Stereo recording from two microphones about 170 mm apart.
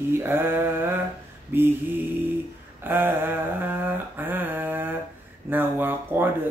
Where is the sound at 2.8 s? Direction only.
10° right (ahead or behind).